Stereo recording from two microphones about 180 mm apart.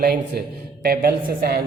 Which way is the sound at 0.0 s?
60° right (ahead or behind).